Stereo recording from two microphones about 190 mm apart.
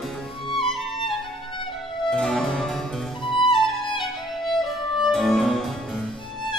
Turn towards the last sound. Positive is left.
turn(degrees=0)  # may be behind; listen again after turning